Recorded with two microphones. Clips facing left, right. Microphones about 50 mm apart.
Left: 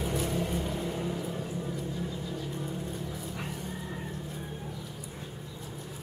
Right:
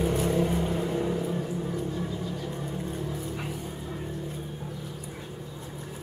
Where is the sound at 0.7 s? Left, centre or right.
Right.